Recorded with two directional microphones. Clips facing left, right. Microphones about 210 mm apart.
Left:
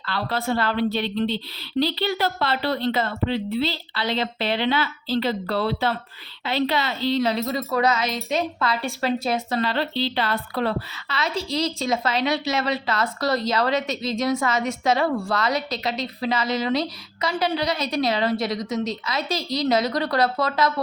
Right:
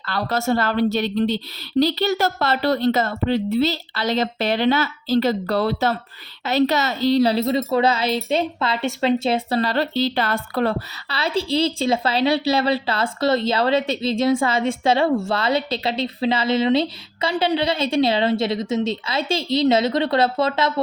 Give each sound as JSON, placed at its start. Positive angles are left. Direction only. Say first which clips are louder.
{"t": 0.0, "sound": "a woman's voice", "louder": "right 4 dB", "side_deg": -45}
{"t": 11.1, "sound": "a woman's voice", "louder": "right 4 dB", "side_deg": -35}